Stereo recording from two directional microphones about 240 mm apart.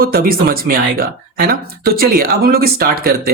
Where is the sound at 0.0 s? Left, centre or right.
Right.